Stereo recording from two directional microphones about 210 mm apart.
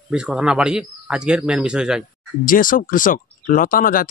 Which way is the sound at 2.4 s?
40° left (ahead or behind).